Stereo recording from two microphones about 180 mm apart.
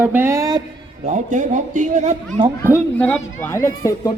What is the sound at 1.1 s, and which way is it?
A man's voice, 45° right (ahead or behind).